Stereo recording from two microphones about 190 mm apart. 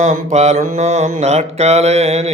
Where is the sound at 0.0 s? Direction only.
35° right (ahead or behind).